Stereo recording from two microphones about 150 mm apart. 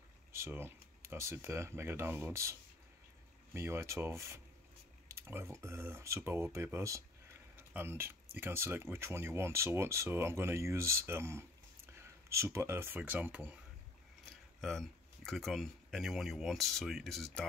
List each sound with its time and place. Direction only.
0.3 s speech: 15° right (ahead or behind)
3.5 s speech: 15° right (ahead or behind)
14.6 s speech: centre (ahead or behind)